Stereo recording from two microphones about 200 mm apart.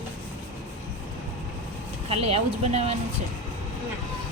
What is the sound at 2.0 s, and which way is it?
Speech, 30° right (ahead or behind).